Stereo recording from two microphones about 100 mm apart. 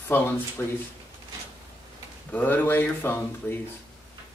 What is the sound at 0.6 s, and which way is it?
Speech, 25° left (ahead or behind).